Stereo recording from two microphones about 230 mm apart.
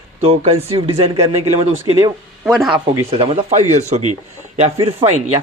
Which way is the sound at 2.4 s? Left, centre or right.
Centre.